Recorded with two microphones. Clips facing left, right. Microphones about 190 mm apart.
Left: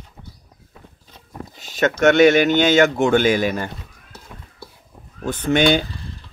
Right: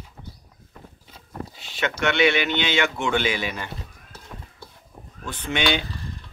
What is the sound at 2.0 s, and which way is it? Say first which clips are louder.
Speech: left 9 dB; 45° left (ahead or behind).